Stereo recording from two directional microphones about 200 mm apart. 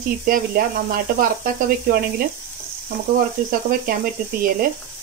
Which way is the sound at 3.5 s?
45° right (ahead or behind).